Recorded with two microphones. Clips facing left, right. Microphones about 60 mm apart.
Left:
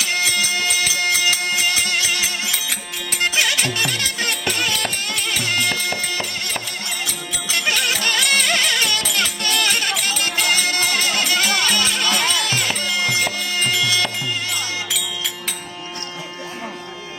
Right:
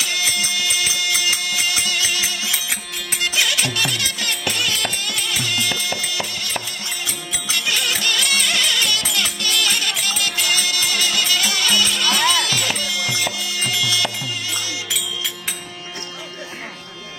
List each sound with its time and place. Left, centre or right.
0.0 s music: left
7.5 s music: left